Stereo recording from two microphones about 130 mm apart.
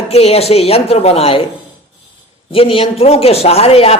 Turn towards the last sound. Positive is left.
turn(degrees=50)  # may be behind; listen again after turning